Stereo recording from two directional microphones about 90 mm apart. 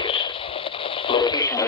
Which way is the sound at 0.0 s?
75° left (ahead or behind).